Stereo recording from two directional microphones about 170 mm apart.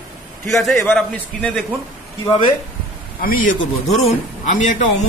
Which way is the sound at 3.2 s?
55° left (ahead or behind).